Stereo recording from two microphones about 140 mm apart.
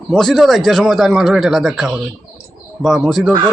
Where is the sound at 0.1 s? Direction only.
5° left (ahead or behind).